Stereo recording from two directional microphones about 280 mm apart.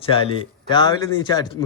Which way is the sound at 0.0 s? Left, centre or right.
Centre.